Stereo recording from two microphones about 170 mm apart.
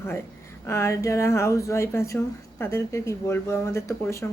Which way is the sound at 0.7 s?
15° left (ahead or behind).